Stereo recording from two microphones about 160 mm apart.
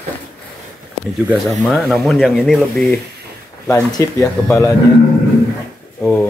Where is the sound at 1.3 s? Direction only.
Centre (ahead or behind).